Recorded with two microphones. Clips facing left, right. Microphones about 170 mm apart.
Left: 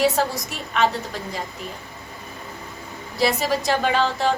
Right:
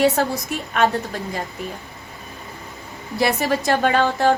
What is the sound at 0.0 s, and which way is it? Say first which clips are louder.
Speech: right 2 dB; 60° right (ahead or behind).